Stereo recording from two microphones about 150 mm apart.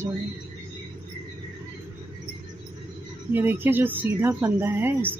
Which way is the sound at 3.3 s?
15° right (ahead or behind).